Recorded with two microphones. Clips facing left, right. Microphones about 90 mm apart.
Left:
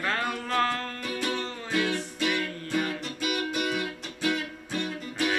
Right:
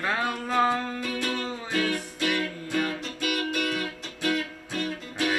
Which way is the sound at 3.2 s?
15° left (ahead or behind).